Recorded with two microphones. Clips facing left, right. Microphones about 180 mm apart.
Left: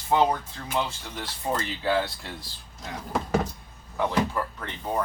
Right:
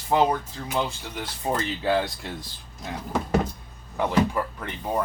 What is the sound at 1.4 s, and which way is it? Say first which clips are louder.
Speech: right 2 dB; 20° right (ahead or behind).